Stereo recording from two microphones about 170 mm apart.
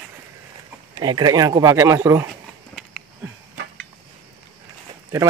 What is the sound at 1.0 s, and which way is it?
Speech, 25° right (ahead or behind).